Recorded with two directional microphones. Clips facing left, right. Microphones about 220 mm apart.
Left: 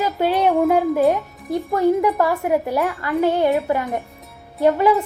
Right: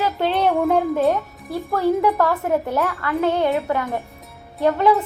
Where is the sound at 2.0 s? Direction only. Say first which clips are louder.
Even; 15° left (ahead or behind).